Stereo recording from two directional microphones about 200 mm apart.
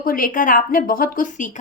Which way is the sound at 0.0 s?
45° left (ahead or behind).